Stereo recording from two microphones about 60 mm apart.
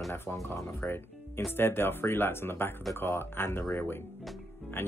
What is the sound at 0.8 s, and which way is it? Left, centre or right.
Speech, left.